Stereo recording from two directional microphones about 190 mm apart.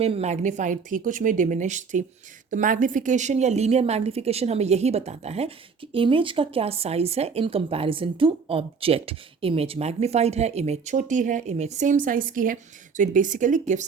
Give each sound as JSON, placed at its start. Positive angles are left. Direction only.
{"t": 0.0, "sound": "speech", "side_deg": -30}